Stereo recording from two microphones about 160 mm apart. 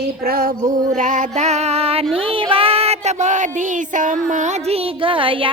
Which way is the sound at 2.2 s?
35° right (ahead or behind).